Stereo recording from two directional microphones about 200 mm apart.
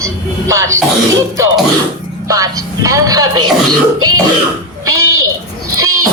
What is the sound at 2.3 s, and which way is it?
Speech, 15° right (ahead or behind).